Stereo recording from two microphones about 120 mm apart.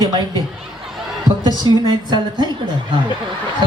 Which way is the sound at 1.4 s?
35° right (ahead or behind).